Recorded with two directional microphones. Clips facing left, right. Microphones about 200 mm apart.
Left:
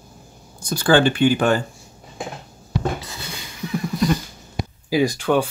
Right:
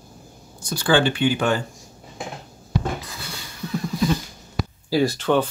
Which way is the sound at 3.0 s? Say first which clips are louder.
Left 2 dB; 20° left (ahead or behind).